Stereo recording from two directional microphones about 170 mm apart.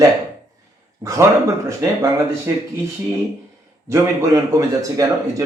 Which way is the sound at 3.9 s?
15° right (ahead or behind).